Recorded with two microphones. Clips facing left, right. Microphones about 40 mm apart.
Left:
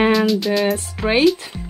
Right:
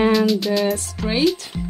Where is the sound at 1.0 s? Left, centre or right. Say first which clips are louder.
Left 8 dB; left.